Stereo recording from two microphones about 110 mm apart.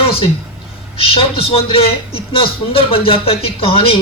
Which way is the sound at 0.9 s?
60° left (ahead or behind).